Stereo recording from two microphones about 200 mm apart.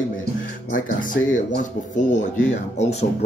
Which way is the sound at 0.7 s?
40° left (ahead or behind).